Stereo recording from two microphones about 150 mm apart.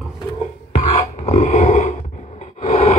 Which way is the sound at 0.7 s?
45° left (ahead or behind).